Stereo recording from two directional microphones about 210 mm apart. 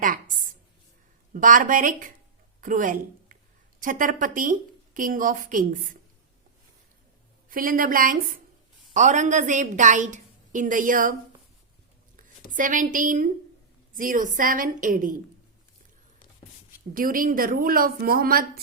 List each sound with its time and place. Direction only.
1.3 s a woman's voice: 40° right (ahead or behind)
7.5 s a woman's voice: 40° right (ahead or behind)
12.5 s a woman's voice: 40° right (ahead or behind)
16.9 s speech: 40° right (ahead or behind)